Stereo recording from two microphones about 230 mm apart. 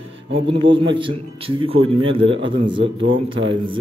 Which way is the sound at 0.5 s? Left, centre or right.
Right.